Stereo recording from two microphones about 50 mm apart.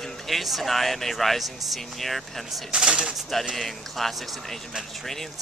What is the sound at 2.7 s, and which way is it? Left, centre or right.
Speech, centre.